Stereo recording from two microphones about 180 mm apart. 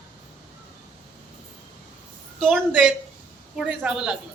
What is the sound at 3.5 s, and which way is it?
Speech, 5° right (ahead or behind).